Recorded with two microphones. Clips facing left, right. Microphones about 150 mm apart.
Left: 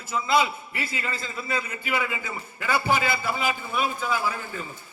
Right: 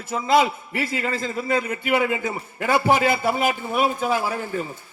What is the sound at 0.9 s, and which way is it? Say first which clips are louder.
A man's voice: right 8 dB; 55° right (ahead or behind).